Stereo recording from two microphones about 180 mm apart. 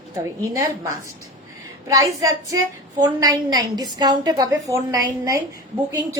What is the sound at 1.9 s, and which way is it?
A woman's voice, 20° right (ahead or behind).